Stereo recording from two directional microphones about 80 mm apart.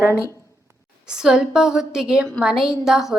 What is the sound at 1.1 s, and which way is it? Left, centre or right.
A woman's voice, centre.